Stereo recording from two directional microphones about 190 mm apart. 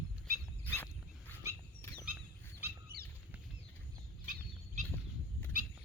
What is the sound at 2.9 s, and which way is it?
Bird flight, 55° right (ahead or behind).